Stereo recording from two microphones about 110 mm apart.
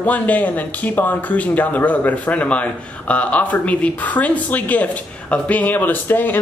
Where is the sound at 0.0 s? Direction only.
15° left (ahead or behind).